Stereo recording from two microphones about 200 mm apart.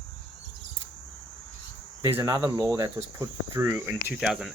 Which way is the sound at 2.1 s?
15° right (ahead or behind).